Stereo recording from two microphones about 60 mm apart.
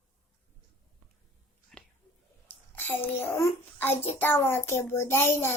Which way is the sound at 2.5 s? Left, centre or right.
Left.